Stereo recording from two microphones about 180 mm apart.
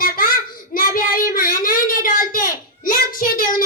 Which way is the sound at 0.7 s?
50° left (ahead or behind).